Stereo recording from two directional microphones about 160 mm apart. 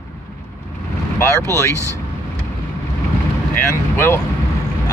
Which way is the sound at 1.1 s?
15° left (ahead or behind).